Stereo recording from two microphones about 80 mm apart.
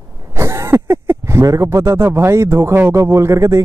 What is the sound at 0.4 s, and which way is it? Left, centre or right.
Speech, right.